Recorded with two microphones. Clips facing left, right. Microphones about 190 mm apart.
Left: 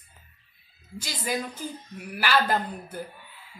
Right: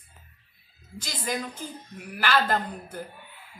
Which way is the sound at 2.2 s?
10° left (ahead or behind).